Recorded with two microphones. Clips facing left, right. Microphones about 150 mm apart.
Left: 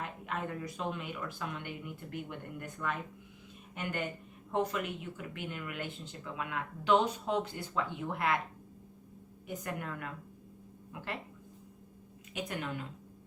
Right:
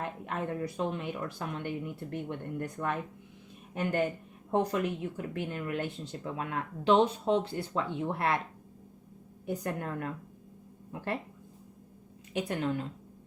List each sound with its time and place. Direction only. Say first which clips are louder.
0.0 s speech: right 3 dB; 30° right (ahead or behind)
4.5 s speech: right 4 dB; 35° right (ahead or behind)
9.5 s speech: right 5 dB; 30° right (ahead or behind)
12.3 s speech: right 7 dB; 30° right (ahead or behind)